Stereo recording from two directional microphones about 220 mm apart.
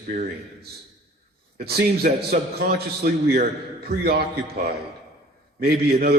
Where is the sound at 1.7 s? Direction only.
45° right (ahead or behind).